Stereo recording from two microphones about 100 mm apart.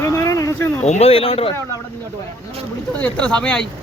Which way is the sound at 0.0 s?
30° left (ahead or behind).